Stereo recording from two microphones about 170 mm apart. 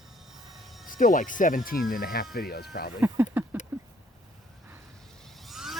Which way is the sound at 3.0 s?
10° right (ahead or behind).